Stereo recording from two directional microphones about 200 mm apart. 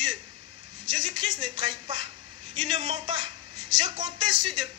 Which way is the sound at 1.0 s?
25° right (ahead or behind).